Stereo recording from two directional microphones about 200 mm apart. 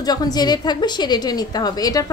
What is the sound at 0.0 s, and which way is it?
A woman's voice, 20° left (ahead or behind).